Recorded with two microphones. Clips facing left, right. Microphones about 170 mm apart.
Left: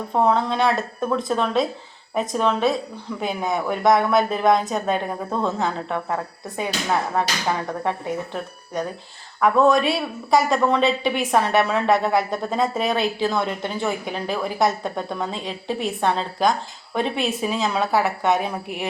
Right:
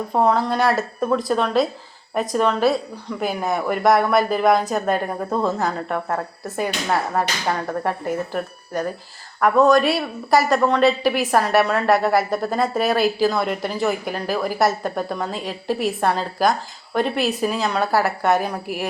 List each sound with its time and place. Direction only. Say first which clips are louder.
0.1 s a woman's voice: right 1 dB; centre (ahead or behind)
7.7 s a woman's voice: right 2 dB; centre (ahead or behind)